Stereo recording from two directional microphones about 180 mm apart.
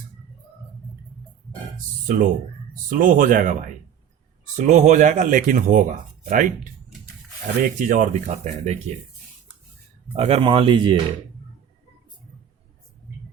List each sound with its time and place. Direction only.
2.0 s speech: 50° right (ahead or behind)
4.5 s speech: 40° right (ahead or behind)
7.6 s speech: 45° right (ahead or behind)
10.2 s speech: 35° right (ahead or behind)